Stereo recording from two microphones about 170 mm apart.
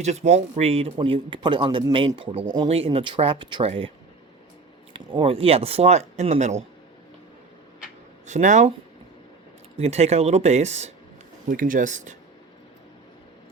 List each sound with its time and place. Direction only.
0.0 s speech: 40° right (ahead or behind)
4.9 s speech: 30° right (ahead or behind)
8.3 s speech: 45° right (ahead or behind)
9.7 s speech: 40° right (ahead or behind)
11.4 s speech: 50° right (ahead or behind)